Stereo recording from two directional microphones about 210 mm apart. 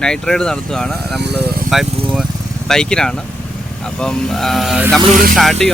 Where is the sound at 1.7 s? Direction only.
Centre (ahead or behind).